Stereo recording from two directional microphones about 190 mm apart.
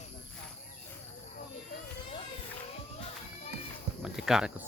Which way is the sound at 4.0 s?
Centre (ahead or behind).